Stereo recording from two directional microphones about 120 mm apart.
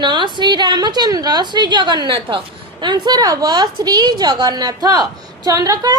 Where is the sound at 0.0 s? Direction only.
40° right (ahead or behind).